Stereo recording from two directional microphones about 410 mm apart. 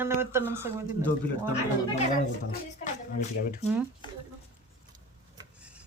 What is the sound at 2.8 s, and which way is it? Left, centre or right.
Speech, left.